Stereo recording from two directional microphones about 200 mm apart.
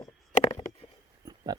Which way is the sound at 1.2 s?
20° right (ahead or behind).